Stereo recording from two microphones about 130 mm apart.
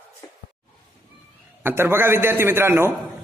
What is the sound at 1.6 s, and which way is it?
A man's voice, 15° right (ahead or behind).